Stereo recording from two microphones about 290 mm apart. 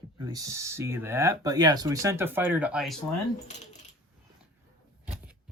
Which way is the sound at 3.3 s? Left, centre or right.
Left.